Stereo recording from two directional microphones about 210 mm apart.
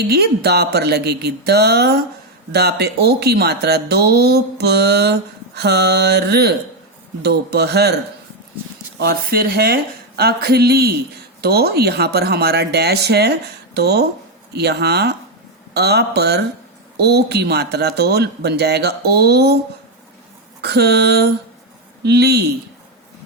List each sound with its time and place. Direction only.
0.1 s speech: 50° right (ahead or behind)
9.0 s speech: 45° right (ahead or behind)
20.6 s speech: 50° right (ahead or behind)